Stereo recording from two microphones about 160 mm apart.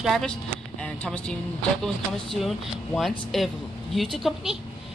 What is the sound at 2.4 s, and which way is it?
A man's voice, centre (ahead or behind).